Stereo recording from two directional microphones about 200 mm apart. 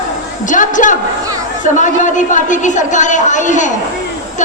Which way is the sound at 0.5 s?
40° left (ahead or behind).